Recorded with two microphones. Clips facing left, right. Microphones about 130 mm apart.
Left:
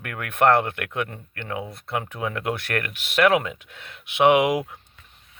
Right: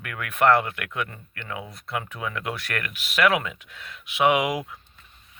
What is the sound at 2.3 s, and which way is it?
Speech, 45° left (ahead or behind).